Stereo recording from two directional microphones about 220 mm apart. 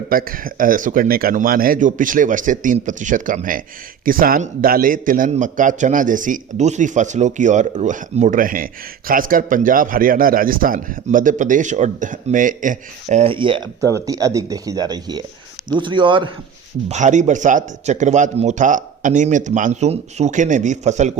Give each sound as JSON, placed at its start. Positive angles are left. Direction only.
{"t": 0.1, "sound": "a man's voice", "side_deg": -40}
{"t": 16.9, "sound": "a man's voice", "side_deg": -35}